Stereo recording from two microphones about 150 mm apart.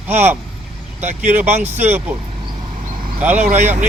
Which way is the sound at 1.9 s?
10° right (ahead or behind).